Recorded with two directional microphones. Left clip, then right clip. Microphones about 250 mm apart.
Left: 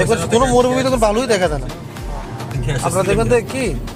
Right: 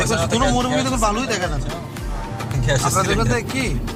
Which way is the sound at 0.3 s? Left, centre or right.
Left.